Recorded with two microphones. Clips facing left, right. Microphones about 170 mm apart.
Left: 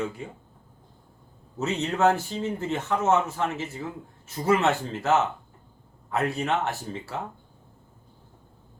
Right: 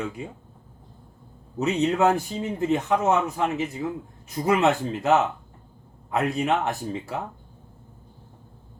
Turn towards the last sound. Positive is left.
turn(degrees=-15)  # may be behind; listen again after turning